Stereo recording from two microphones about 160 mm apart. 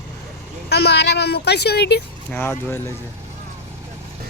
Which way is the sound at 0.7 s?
90° left.